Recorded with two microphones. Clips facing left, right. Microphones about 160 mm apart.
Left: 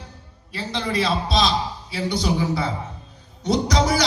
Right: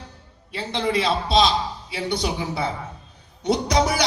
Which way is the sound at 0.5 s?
25° right (ahead or behind).